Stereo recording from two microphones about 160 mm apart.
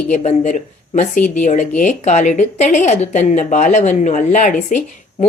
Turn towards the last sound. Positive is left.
turn(degrees=50)  # may be behind; listen again after turning